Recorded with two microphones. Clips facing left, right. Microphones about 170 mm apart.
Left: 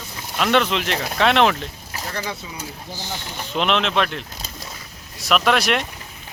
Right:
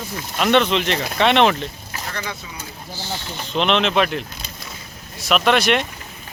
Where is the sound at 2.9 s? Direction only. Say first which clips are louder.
Right 4 dB; 15° left (ahead or behind).